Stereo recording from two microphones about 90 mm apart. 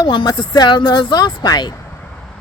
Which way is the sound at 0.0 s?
60° left (ahead or behind).